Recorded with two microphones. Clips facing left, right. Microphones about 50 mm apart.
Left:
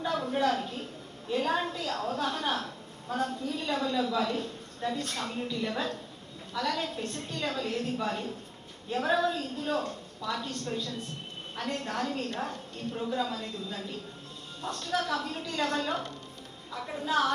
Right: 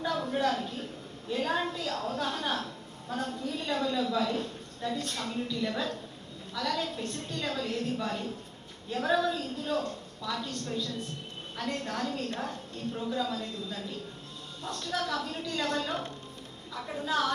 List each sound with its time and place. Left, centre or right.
0.0 s a sound: left
0.3 s a woman's voice: left
17.1 s a woman's voice: left